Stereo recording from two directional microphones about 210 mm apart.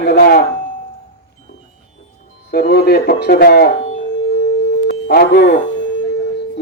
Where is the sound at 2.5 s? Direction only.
50° left (ahead or behind).